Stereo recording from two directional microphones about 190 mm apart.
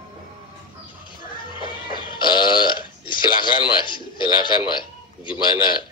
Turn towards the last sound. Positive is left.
turn(degrees=25)  # may be behind; listen again after turning